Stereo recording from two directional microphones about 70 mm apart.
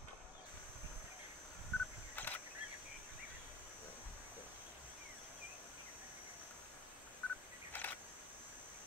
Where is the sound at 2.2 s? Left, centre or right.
Left.